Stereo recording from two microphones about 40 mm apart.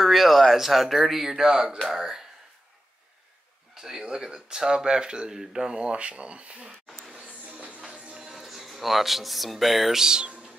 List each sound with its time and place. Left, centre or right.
0.0 s speech: centre
3.7 s speech: centre
5.8 s speech: right
7.2 s a sound: right
7.9 s music: right
8.3 s speech: centre
10.0 s speech: centre